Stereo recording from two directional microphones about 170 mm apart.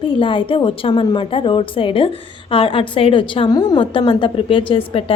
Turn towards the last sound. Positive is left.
turn(degrees=30)  # may be behind; listen again after turning